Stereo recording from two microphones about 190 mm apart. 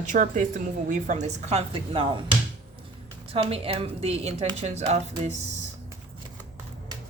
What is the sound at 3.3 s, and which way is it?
Speech, 30° right (ahead or behind).